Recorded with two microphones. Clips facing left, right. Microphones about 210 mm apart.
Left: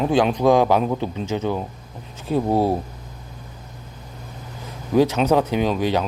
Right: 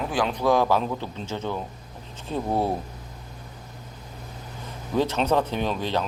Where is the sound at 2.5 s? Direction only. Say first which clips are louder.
Left 5 dB; 30° left (ahead or behind).